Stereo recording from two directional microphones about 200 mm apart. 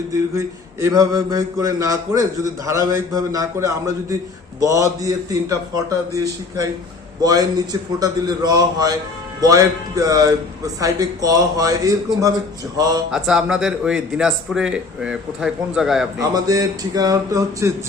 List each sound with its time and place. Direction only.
0.1 s mantra: 15° right (ahead or behind)
7.2 s a man's voice: 20° right (ahead or behind)
9.4 s mantra: 15° right (ahead or behind)
12.7 s a man's voice: 20° right (ahead or behind)
13.1 s a man's voice: 5° right (ahead or behind)
16.1 s mantra: 20° right (ahead or behind)